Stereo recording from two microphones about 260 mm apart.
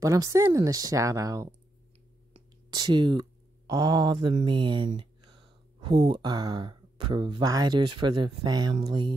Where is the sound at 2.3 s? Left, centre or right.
Centre.